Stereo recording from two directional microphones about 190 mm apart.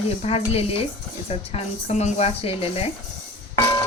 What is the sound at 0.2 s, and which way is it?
Speech, 30° left (ahead or behind).